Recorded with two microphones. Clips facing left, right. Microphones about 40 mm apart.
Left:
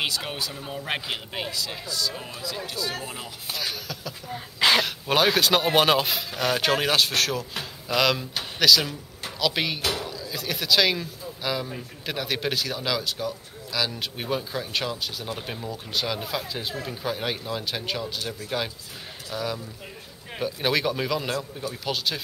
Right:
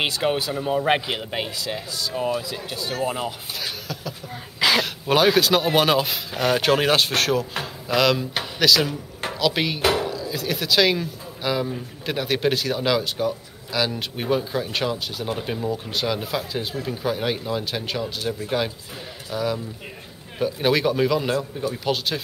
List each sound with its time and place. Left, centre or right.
0.0 s speech: right
3.5 s speech: centre
9.8 s speech: right
10.0 s speech: centre
18.0 s speech: centre